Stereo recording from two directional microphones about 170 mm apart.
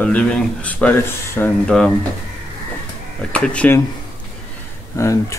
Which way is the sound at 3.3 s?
5° left (ahead or behind).